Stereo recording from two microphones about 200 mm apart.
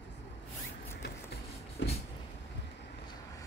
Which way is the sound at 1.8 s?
65° left (ahead or behind).